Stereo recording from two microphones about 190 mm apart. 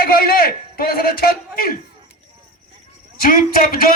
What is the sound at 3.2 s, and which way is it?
Speech, 50° left (ahead or behind).